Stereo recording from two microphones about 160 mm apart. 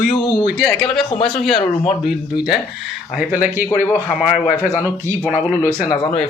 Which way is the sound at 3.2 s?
10° right (ahead or behind).